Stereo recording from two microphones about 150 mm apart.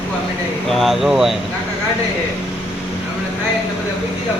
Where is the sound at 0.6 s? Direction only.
Centre (ahead or behind).